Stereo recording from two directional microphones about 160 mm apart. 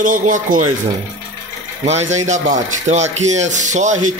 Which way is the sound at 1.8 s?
45° right (ahead or behind).